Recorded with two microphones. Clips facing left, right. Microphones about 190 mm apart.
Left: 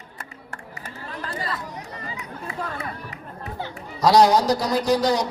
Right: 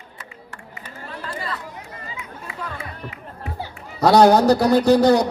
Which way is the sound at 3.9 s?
60° right (ahead or behind).